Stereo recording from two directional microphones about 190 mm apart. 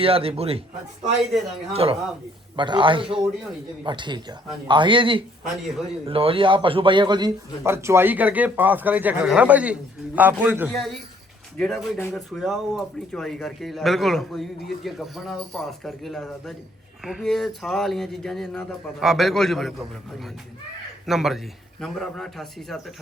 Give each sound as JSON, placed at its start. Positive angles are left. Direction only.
{"t": 0.0, "sound": "speech", "side_deg": -30}
{"t": 1.7, "sound": "a man's voice", "side_deg": -30}
{"t": 11.6, "sound": "speech", "side_deg": 5}
{"t": 21.1, "sound": "speech", "side_deg": 0}